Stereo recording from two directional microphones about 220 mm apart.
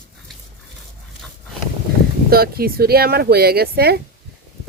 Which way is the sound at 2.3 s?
45° right (ahead or behind).